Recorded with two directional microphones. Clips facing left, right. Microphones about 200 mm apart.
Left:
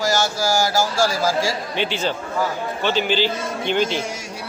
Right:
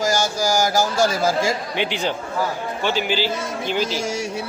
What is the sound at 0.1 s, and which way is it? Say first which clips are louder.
A man's voice: even; 15° right (ahead or behind).